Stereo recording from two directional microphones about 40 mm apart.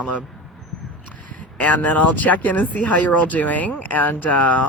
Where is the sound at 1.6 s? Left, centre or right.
Left.